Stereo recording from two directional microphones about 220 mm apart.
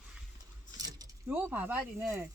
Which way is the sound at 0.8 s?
15° right (ahead or behind).